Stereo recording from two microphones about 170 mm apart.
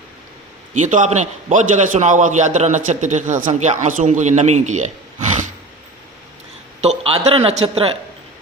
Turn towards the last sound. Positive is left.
turn(degrees=-35)  # may be behind; listen again after turning